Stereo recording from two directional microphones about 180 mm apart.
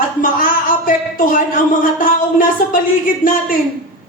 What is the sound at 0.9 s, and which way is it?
A woman's voice, 50° left (ahead or behind).